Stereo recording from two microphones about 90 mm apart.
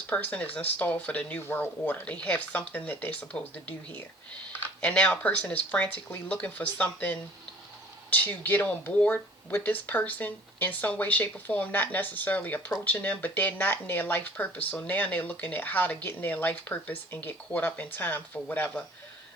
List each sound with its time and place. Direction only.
0.1 s speech: 20° left (ahead or behind)